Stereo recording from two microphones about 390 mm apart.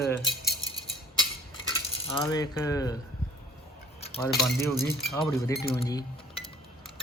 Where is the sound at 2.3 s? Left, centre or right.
Centre.